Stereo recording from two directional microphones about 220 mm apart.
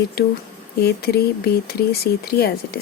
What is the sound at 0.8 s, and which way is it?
Speech, 45° left (ahead or behind).